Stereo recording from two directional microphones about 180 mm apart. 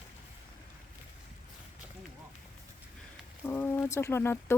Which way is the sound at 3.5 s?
10° left (ahead or behind).